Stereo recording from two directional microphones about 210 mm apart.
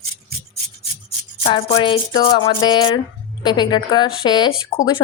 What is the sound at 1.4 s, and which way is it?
Speech, 25° left (ahead or behind).